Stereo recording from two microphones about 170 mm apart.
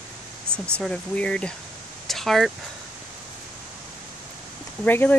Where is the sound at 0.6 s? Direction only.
5° left (ahead or behind).